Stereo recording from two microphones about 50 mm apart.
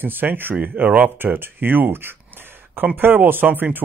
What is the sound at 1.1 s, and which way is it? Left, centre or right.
Speech, right.